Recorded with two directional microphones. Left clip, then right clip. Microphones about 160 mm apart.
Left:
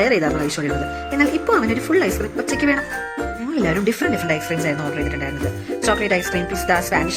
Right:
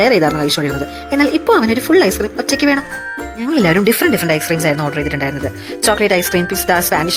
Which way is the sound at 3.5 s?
40° right (ahead or behind).